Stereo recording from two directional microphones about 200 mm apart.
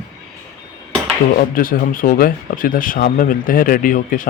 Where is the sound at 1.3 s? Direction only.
45° left (ahead or behind).